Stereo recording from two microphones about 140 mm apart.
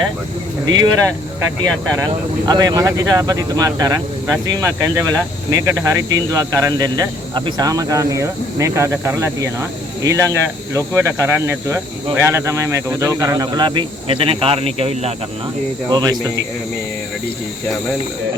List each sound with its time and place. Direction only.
0.6 s speech: 30° right (ahead or behind); by 15.1 s 45° right (ahead or behind)
15.9 s speech: 30° right (ahead or behind)